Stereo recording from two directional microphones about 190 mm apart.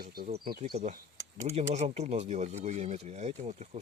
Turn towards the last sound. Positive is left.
turn(degrees=-35)  # may be behind; listen again after turning